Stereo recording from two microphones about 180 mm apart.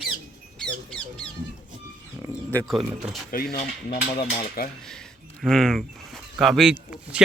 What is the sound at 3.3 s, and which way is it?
Cutlery, 55° left (ahead or behind).